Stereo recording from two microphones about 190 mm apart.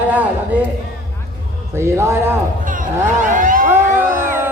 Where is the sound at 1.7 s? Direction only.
15° right (ahead or behind).